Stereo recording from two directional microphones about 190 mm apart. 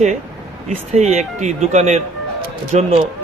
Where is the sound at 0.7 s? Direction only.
40° right (ahead or behind).